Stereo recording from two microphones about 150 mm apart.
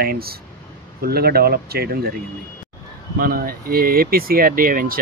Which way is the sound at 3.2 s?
75° right (ahead or behind).